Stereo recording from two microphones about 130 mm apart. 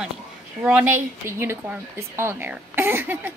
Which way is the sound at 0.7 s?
10° right (ahead or behind).